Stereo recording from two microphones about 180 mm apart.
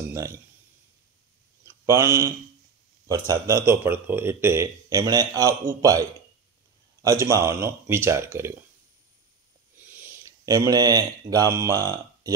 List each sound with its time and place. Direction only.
0.1 s speech: 15° right (ahead or behind)
1.9 s a man's voice: 15° right (ahead or behind)
9.8 s speech: 10° right (ahead or behind)